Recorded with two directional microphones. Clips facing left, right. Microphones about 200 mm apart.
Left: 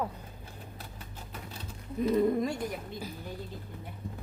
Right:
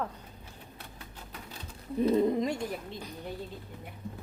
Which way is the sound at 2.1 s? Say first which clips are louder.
Even; 20° right (ahead or behind).